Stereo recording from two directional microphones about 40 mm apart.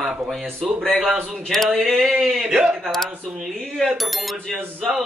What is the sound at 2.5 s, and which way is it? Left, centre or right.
Speech, right.